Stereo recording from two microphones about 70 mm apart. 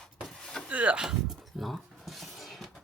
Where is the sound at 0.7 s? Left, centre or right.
Centre.